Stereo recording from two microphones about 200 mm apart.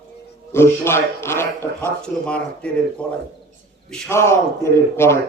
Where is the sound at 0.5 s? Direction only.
10° left (ahead or behind).